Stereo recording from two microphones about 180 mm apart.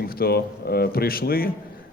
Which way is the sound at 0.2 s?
60° left (ahead or behind).